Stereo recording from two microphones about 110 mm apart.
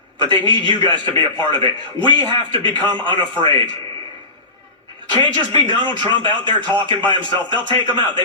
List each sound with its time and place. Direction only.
0.2 s speech: 45° right (ahead or behind)
5.1 s speech: 45° right (ahead or behind)